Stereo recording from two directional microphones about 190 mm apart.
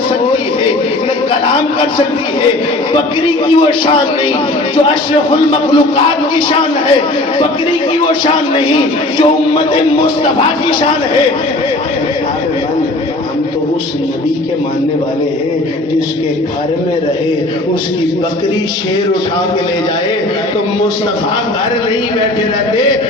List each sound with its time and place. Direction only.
1.5 s a sound: 25° left (ahead or behind)
2.9 s a man's voice: 25° left (ahead or behind)
8.0 s a man's voice: 25° left (ahead or behind)